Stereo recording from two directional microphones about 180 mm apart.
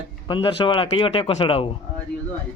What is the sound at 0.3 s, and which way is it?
Speech, 25° left (ahead or behind).